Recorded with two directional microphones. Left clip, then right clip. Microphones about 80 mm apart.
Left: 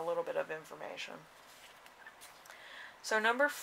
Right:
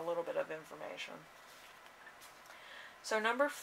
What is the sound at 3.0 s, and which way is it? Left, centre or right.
Speech, left.